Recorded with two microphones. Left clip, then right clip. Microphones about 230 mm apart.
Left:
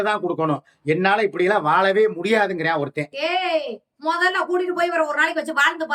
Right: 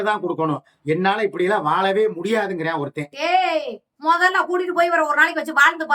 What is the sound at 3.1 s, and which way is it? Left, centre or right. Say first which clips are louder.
A child's voice: right 4 dB; centre.